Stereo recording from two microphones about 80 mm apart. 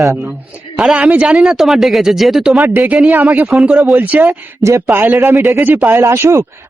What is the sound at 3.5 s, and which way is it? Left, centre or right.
Speech, centre.